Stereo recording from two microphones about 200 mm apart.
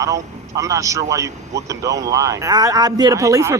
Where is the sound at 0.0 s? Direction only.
15° right (ahead or behind).